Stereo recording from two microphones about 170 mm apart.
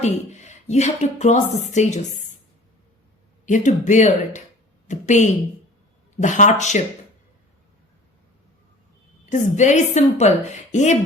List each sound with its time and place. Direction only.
0.0 s speech: 40° left (ahead or behind)
3.4 s speech: 45° left (ahead or behind)
9.3 s speech: 45° left (ahead or behind)